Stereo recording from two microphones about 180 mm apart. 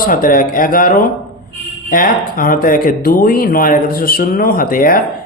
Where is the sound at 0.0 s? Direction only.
50° left (ahead or behind).